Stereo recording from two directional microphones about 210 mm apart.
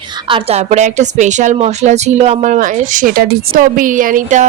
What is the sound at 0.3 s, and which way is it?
A woman's voice, 25° right (ahead or behind).